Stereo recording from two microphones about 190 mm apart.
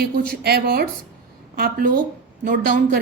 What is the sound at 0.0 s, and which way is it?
A woman's voice, 55° right (ahead or behind).